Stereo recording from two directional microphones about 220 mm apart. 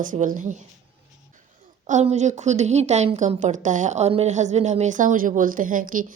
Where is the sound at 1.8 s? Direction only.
30° right (ahead or behind).